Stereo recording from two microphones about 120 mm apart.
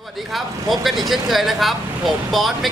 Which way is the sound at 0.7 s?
Centre (ahead or behind).